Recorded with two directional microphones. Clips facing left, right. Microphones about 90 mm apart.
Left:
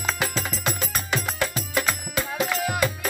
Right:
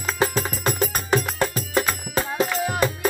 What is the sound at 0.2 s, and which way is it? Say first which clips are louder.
Music: right 5 dB; 40° right (ahead or behind).